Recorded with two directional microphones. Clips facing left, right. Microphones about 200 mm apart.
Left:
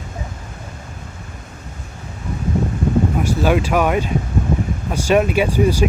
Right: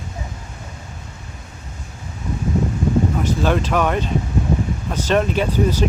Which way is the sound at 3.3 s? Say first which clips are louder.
Left 2 dB; 10° left (ahead or behind).